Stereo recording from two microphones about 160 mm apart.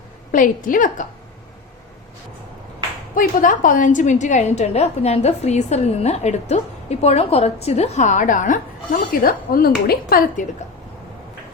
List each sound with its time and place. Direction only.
0.3 s a woman's voice: 55° left (ahead or behind)
3.2 s a woman's voice: 55° left (ahead or behind)
9.2 s a woman's voice: 65° left (ahead or behind)